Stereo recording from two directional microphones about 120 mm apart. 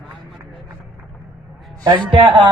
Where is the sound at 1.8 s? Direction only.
40° right (ahead or behind).